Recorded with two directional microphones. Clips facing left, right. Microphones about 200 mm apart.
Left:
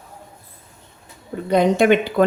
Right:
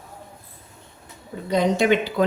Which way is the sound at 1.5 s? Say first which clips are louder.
Left 4 dB; 55° left (ahead or behind).